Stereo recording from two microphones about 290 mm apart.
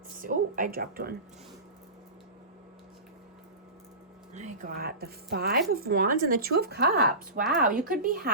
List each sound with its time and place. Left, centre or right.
0.2 s speech: right
4.4 s speech: right